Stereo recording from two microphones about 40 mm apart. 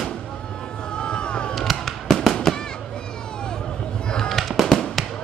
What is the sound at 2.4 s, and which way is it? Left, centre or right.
Fireworks, centre.